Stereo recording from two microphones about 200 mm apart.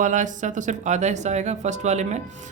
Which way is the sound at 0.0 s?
40° right (ahead or behind).